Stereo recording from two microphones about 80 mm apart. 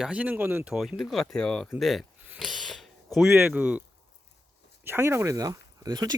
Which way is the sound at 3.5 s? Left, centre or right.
Centre.